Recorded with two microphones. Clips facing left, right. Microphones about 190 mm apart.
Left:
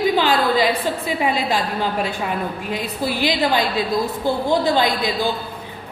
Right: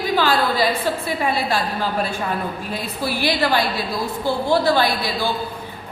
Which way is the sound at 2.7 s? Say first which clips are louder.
Left 3 dB; 20° left (ahead or behind).